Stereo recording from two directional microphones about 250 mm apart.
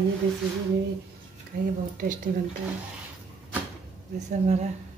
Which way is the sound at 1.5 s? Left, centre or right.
Right.